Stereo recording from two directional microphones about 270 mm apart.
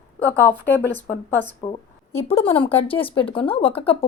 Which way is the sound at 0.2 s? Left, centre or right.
Centre.